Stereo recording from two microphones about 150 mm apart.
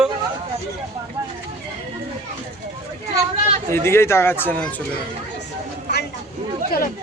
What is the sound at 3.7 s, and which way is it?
Speech, 15° left (ahead or behind).